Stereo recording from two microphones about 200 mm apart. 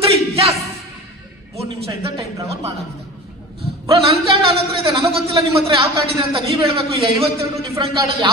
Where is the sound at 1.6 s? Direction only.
25° right (ahead or behind).